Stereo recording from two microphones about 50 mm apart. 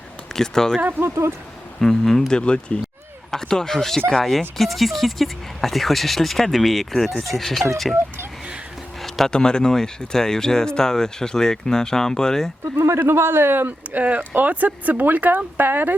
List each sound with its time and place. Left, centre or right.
0.3 s speech: centre
0.8 s speech: right
1.0 s speech: right
1.8 s speech: centre
2.4 s speech: left
3.3 s speech: centre
9.0 s a sound: centre
9.3 s speech: centre
13.0 s speech: right